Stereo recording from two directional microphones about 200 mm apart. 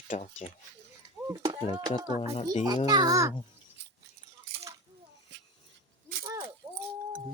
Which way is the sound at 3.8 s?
60° right (ahead or behind).